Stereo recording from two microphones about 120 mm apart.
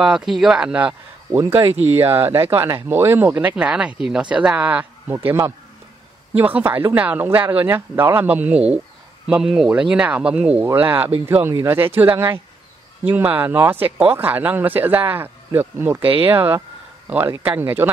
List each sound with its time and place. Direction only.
0.0 s speech: 5° right (ahead or behind); by 1.7 s 20° right (ahead or behind)
1.7 s speech: 60° right (ahead or behind)
2.0 s speech: 20° right (ahead or behind)